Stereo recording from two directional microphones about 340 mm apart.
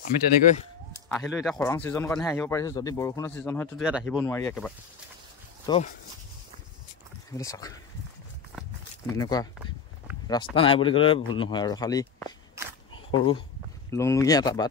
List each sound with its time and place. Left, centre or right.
1.0 s speech: centre
4.2 s speech: centre
7.3 s speech: centre
8.5 s walk: centre
10.2 s speech: centre
12.9 s a sound: centre
13.8 s speech: centre